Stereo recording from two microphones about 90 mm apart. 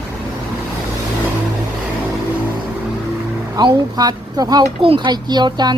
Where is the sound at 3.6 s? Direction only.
50° right (ahead or behind).